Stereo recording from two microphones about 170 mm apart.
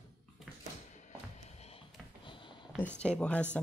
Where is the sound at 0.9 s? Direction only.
40° left (ahead or behind).